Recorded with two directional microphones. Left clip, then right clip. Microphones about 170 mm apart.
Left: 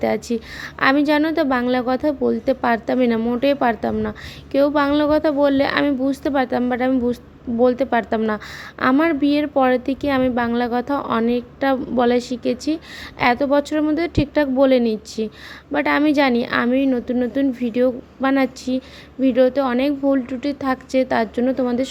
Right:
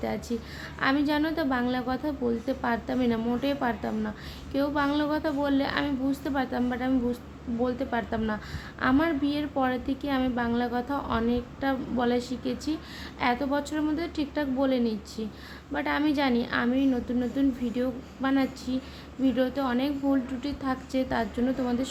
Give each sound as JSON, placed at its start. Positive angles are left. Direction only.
{"t": 0.0, "sound": "a woman's voice", "side_deg": 45}